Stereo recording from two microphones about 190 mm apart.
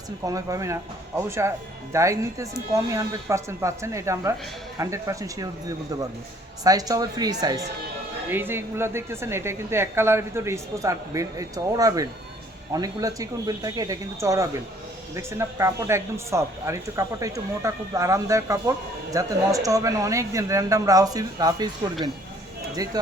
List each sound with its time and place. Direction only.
0.3 s a woman's voice: 15° right (ahead or behind)
6.7 s a woman's voice: 20° right (ahead or behind)
22.8 s speech: 20° right (ahead or behind)